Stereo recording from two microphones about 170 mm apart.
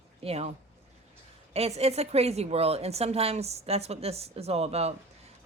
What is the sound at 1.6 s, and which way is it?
A woman's voice, 40° right (ahead or behind).